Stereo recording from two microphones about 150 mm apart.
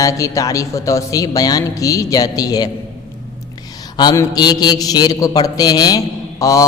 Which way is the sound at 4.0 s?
25° left (ahead or behind).